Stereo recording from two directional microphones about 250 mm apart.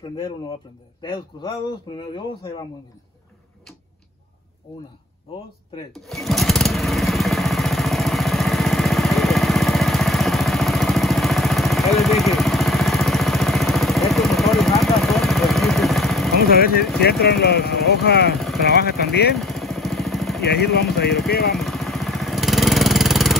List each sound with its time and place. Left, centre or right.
1.0 s a man's voice: centre
5.9 s lawn mower: centre
17.0 s speech: left
19.3 s vehicle: centre
20.4 s speech: left
21.5 s vehicle: centre